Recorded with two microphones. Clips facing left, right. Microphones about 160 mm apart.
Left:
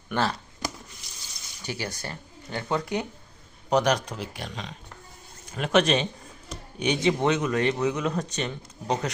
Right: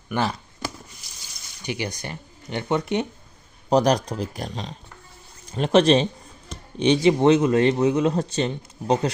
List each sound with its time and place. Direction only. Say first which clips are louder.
0.1 s speech: right 2 dB; 15° right (ahead or behind)
1.6 s speech: right 4 dB; 15° right (ahead or behind)
3.7 s speech: right 4 dB; 35° right (ahead or behind)